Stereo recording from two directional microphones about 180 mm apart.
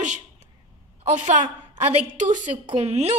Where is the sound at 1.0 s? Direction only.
40° right (ahead or behind).